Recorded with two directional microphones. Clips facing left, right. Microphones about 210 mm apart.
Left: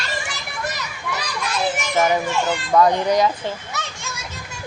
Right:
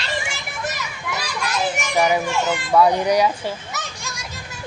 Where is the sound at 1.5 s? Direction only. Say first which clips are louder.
Left 1 dB; 10° right (ahead or behind).